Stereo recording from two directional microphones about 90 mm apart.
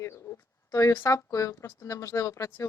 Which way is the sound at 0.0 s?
30° left (ahead or behind).